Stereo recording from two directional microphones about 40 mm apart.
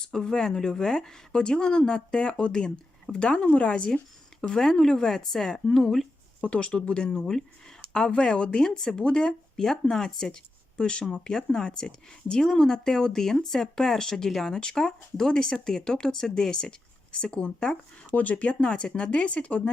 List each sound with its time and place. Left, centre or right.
0.0 s speech: centre
6.4 s speech: left
8.6 s speech: centre
17.2 s speech: left
18.1 s speech: left
18.4 s speech: left